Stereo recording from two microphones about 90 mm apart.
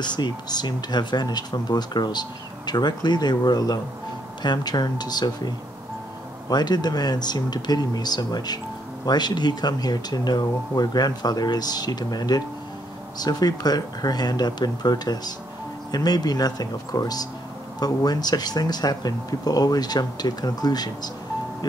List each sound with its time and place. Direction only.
0.0 s speech: 55° left (ahead or behind)
6.5 s speech: 50° left (ahead or behind)